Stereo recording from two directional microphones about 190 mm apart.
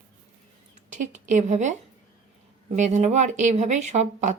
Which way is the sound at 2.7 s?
40° right (ahead or behind).